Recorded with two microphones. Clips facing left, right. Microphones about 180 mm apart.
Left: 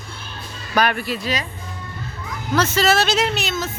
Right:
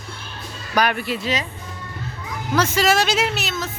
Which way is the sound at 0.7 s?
15° right (ahead or behind).